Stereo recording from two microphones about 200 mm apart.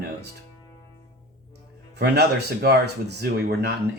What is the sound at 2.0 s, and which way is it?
Speech, 55° right (ahead or behind).